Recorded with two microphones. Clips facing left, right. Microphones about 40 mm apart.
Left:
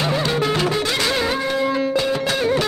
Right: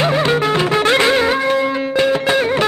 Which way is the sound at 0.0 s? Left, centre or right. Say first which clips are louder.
Right 5 dB; right.